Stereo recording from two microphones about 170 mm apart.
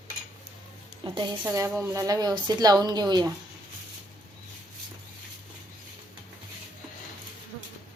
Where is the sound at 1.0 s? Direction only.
30° right (ahead or behind).